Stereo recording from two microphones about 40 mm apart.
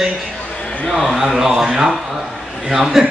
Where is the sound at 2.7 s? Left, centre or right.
Centre.